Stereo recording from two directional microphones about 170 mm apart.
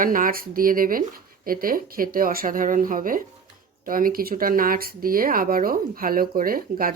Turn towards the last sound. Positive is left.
turn(degrees=-55)  # may be behind; listen again after turning